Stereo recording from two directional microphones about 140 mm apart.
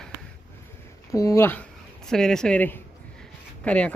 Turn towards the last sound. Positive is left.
turn(degrees=10)  # may be behind; listen again after turning